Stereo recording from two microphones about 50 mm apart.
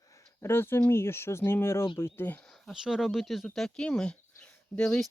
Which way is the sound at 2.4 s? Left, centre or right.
Centre.